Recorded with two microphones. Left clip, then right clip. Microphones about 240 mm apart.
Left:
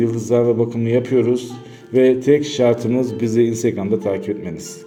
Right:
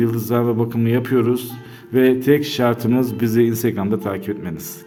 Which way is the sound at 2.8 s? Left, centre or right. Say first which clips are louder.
Even; right.